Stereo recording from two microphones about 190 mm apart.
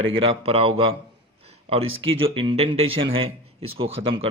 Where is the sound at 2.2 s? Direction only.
30° right (ahead or behind).